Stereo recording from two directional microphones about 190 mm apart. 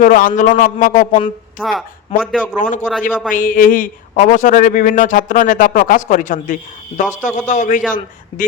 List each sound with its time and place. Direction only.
0.0 s a man's voice: 45° left (ahead or behind)
1.5 s a man's voice: centre (ahead or behind)
2.6 s a man's voice: 40° left (ahead or behind)